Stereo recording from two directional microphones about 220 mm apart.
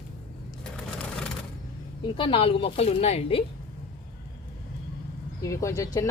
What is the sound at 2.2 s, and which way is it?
Speech, 25° left (ahead or behind).